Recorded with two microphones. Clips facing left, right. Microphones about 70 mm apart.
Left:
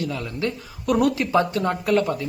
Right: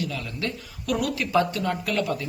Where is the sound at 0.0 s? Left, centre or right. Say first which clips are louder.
Left 4 dB; left.